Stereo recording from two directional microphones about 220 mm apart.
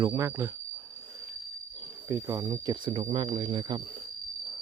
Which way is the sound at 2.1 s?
15° right (ahead or behind).